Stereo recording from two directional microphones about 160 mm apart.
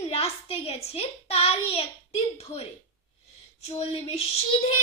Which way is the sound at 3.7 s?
40° left (ahead or behind).